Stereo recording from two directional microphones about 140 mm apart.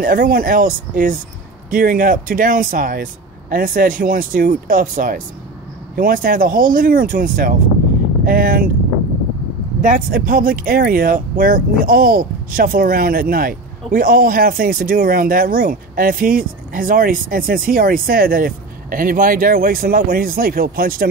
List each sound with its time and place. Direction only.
0.0 s speech: 90° right
1.7 s speech: 90° right; by 5.2 s 70° right (ahead or behind)
5.9 s speech: 85° right
8.3 s speech: 90° right
9.8 s speech: 75° right (ahead or behind)